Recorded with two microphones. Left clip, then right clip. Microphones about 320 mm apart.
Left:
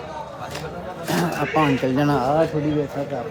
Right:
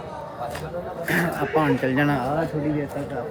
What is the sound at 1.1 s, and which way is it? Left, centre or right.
Speech, centre.